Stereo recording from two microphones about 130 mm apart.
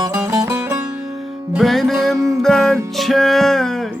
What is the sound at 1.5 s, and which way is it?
Music, centre (ahead or behind).